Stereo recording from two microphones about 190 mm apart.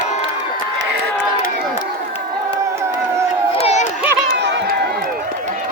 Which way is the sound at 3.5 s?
35° left (ahead or behind).